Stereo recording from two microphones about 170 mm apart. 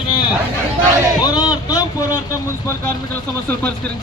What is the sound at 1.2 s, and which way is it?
Speech, 20° left (ahead or behind).